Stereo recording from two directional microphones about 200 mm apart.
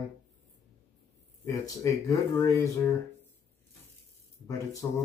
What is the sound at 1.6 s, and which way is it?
Speech, 15° left (ahead or behind).